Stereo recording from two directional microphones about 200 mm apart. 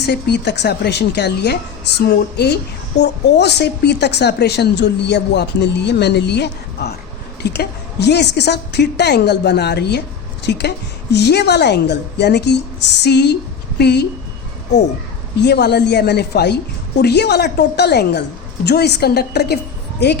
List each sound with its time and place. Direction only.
0.0 s a woman's voice: 55° left (ahead or behind)
15.4 s speech: 55° left (ahead or behind)